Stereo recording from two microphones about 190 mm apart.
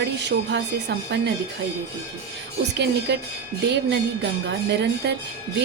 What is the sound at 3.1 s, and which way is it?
Speech, 65° right (ahead or behind).